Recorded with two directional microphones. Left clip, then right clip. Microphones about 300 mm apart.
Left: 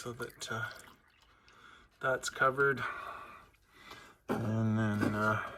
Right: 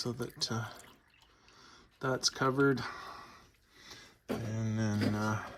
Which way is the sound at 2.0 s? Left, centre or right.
Centre.